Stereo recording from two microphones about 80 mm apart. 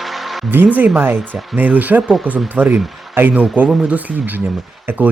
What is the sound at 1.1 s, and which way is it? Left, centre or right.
Speech, centre.